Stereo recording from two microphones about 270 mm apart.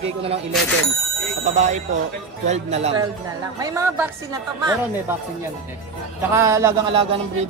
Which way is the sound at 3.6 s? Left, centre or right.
Centre.